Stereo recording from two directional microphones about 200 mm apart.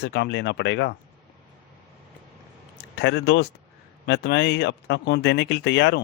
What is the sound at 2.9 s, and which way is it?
Speech, 60° left (ahead or behind).